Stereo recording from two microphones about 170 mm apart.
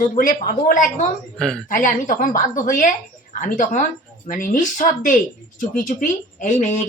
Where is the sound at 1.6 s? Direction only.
50° left (ahead or behind).